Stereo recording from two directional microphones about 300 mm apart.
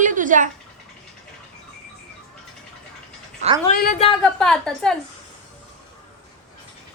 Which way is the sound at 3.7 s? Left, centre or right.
Left.